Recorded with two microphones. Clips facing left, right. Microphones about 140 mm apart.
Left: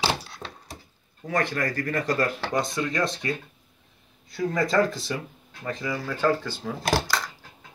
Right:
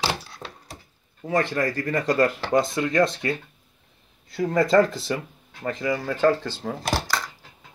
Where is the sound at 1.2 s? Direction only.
25° right (ahead or behind).